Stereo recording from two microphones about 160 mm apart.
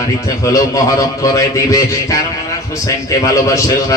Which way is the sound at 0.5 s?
20° left (ahead or behind).